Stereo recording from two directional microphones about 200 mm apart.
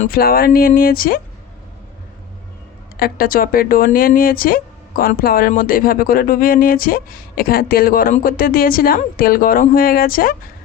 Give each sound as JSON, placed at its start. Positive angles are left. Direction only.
{"t": 0.0, "sound": "speech", "side_deg": 45}
{"t": 3.0, "sound": "speech", "side_deg": 45}